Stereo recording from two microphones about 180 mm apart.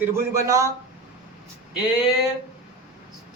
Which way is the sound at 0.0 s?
15° right (ahead or behind).